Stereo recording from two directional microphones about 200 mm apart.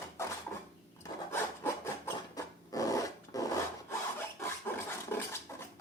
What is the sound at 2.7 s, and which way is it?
Filing, 15° left (ahead or behind).